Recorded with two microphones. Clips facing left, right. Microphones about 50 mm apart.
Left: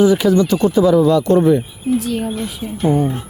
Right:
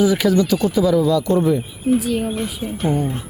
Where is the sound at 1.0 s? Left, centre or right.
Left.